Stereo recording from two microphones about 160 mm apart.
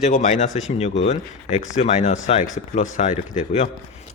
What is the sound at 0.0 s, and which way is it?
Speech, 50° left (ahead or behind).